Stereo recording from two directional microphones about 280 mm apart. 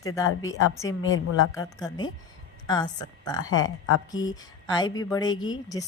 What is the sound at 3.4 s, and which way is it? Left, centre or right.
Speech, left.